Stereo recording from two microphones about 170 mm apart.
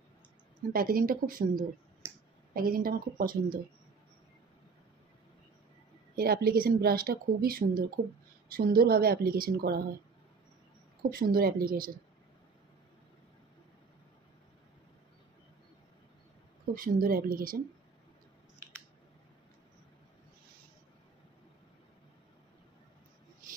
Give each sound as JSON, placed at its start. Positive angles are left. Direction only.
{"t": 0.7, "sound": "speech", "side_deg": -60}
{"t": 2.0, "sound": "a sound", "side_deg": -15}
{"t": 2.5, "sound": "speech", "side_deg": -60}
{"t": 6.1, "sound": "speech", "side_deg": -60}
{"t": 11.0, "sound": "speech", "side_deg": -60}
{"t": 16.7, "sound": "speech", "side_deg": -55}